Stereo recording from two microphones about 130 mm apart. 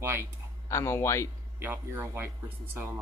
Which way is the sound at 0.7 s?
20° left (ahead or behind).